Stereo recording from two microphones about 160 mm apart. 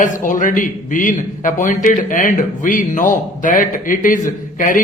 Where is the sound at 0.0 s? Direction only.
55° left (ahead or behind).